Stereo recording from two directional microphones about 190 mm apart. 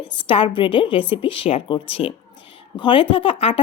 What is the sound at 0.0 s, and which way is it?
Speech, 25° left (ahead or behind).